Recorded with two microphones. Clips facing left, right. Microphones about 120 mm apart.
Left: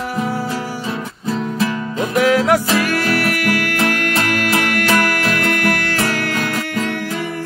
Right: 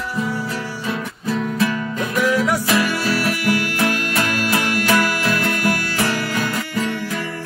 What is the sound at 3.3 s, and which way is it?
Music, 60° left (ahead or behind).